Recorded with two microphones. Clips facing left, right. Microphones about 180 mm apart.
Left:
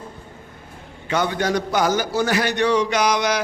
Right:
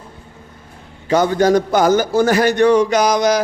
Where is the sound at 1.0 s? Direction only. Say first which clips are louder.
Right 8 dB; 40° right (ahead or behind).